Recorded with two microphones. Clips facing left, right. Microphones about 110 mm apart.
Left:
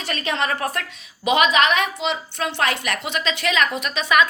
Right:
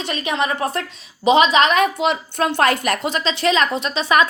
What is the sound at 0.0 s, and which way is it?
A woman's voice, 20° right (ahead or behind).